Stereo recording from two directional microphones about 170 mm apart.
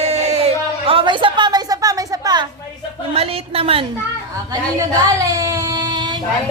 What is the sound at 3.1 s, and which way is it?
Speech, 35° right (ahead or behind).